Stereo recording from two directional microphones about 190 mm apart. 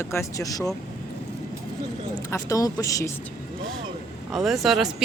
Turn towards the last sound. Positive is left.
turn(degrees=0)  # may be behind; listen again after turning